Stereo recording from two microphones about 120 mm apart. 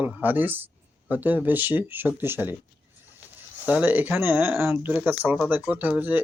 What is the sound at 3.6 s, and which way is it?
Speech, 15° right (ahead or behind).